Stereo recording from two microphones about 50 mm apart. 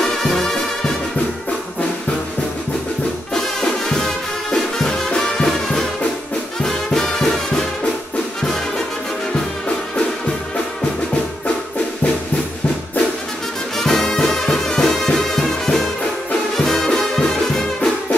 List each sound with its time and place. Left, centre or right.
0.0 s music: centre
3.6 s music: centre
13.7 s music: centre